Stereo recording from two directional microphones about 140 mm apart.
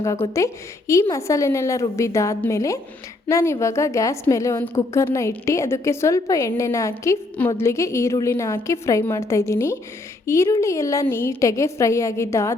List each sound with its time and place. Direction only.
0.3 s a woman's voice: 20° left (ahead or behind)